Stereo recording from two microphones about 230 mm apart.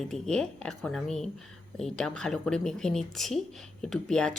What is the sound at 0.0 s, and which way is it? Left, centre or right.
Speech, centre.